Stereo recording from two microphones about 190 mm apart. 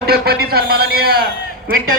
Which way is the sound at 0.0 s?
55° right (ahead or behind).